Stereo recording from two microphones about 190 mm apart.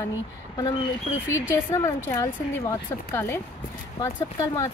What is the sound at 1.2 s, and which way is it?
Speech, 90° left.